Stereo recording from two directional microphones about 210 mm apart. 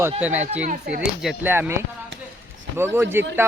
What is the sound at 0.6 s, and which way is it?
Speech, 50° right (ahead or behind).